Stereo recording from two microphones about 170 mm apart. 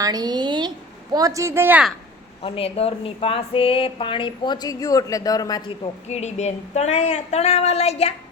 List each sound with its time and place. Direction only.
0.0 s a woman's voice: 25° right (ahead or behind)
2.4 s speech: 35° left (ahead or behind)
6.1 s a woman's voice: 40° left (ahead or behind)